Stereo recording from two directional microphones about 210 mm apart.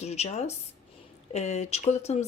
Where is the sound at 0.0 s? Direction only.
30° left (ahead or behind).